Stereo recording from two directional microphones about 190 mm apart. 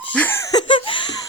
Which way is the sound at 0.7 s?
25° left (ahead or behind).